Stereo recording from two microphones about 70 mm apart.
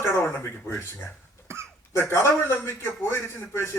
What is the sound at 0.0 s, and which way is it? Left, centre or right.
Speech, left.